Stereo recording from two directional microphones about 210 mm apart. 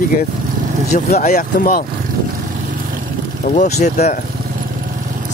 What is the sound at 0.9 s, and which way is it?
Speech, 35° left (ahead or behind).